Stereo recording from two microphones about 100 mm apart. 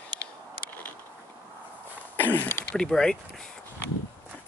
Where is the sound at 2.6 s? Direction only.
10° left (ahead or behind).